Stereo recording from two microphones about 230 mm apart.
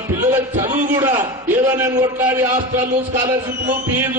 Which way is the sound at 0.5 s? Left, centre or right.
Right.